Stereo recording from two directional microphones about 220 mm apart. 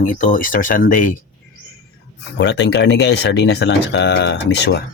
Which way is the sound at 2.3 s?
50° left (ahead or behind).